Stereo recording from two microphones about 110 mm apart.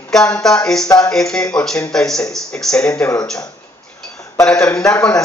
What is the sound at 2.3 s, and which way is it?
Speech, 5° left (ahead or behind).